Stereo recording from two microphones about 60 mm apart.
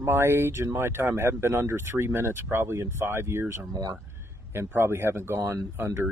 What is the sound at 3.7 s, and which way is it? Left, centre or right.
Speech, right.